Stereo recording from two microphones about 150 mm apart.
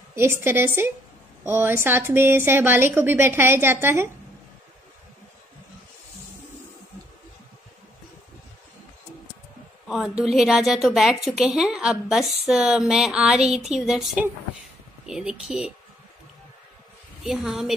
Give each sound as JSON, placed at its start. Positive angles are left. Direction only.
{"t": 0.1, "sound": "a woman's voice", "side_deg": -15}
{"t": 9.8, "sound": "a woman's voice", "side_deg": -5}
{"t": 17.2, "sound": "a woman's voice", "side_deg": 0}